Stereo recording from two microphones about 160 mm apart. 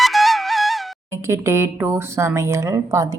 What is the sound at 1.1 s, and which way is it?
Speech, 15° right (ahead or behind).